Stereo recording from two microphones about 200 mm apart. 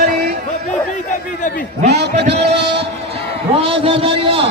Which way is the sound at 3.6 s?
25° right (ahead or behind).